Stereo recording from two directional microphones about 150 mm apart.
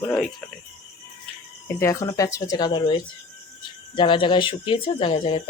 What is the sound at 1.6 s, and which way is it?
Speech, 15° left (ahead or behind).